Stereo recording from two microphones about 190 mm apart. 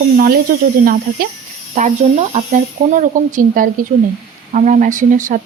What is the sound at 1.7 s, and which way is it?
Speech, 40° right (ahead or behind).